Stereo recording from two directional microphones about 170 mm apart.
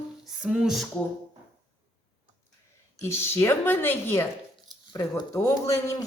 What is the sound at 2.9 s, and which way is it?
A man's voice, 15° left (ahead or behind).